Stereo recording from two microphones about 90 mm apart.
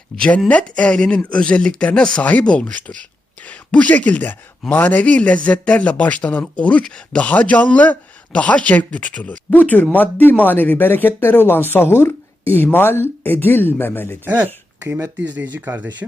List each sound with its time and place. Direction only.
0.2 s a man's voice: 15° left (ahead or behind)
14.3 s speech: 20° right (ahead or behind)